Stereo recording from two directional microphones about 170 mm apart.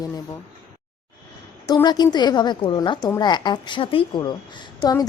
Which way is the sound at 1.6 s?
25° left (ahead or behind).